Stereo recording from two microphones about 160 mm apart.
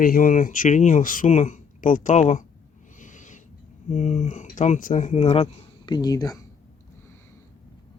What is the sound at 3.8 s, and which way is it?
Speech, 45° left (ahead or behind).